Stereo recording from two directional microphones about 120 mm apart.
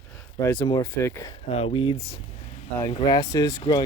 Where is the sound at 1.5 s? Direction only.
80° left.